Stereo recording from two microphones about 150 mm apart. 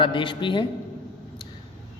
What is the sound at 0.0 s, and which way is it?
Speech, 35° left (ahead or behind).